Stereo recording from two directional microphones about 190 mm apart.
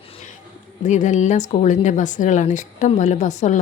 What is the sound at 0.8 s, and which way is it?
Speech, 40° left (ahead or behind).